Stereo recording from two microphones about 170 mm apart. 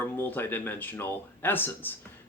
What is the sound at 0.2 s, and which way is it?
Speech, 10° left (ahead or behind).